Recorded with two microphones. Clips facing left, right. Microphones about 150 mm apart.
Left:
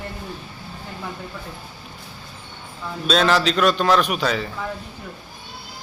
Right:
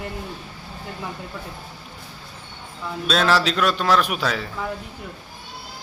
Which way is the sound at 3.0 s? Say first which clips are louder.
Left 2 dB; centre (ahead or behind).